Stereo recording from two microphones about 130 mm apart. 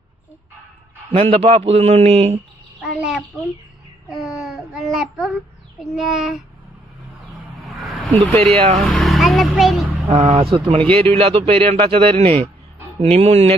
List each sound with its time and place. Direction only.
1.1 s speech: 50° right (ahead or behind)
2.8 s a child's voice: 10° right (ahead or behind)
4.1 s child singing: 5° right (ahead or behind)
7.6 s a sound: centre (ahead or behind)
8.5 s speech: 50° right (ahead or behind)
8.8 s speech: centre (ahead or behind)
10.1 s speech: 50° right (ahead or behind)